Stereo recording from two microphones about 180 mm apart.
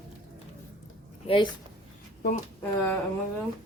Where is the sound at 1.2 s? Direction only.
30° left (ahead or behind).